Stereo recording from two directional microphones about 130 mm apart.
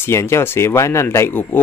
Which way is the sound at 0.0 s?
20° left (ahead or behind).